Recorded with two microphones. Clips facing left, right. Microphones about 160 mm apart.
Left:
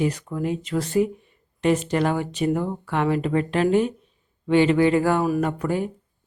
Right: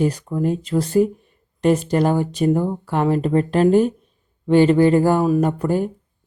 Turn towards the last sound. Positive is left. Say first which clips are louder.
# right 4 dB
turn(degrees=-40)  # may be behind; listen again after turning